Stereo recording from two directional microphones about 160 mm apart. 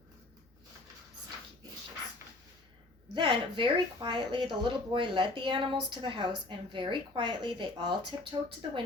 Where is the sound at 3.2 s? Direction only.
30° right (ahead or behind).